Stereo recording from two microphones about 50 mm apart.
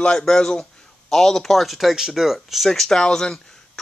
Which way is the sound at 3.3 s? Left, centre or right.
Centre.